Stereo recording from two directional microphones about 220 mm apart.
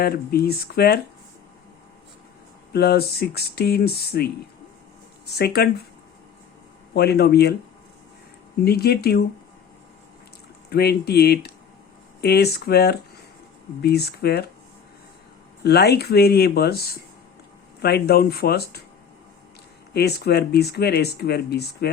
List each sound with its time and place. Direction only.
0.0 s speech: 45° left (ahead or behind)
2.7 s speech: 45° left (ahead or behind)
6.9 s speech: 45° left (ahead or behind)
8.6 s speech: 45° left (ahead or behind)
10.7 s speech: 45° left (ahead or behind)
15.6 s speech: 45° left (ahead or behind)
19.9 s speech: 45° left (ahead or behind)